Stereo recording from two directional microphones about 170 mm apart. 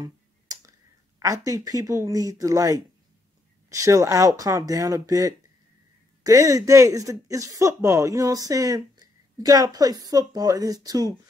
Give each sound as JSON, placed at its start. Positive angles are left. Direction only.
{"t": 0.0, "sound": "finger snapping", "side_deg": -20}
{"t": 1.2, "sound": "speech", "side_deg": -20}